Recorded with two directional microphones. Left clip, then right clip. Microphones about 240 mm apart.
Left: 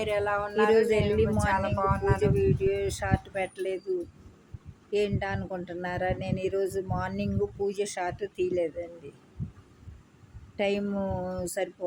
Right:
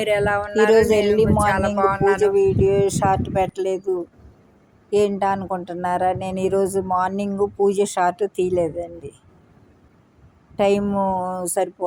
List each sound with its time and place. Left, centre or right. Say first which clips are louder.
0.0 s speech: right 8 dB; right
4.9 s speech: right 10 dB; right
10.6 s speech: right 10 dB; right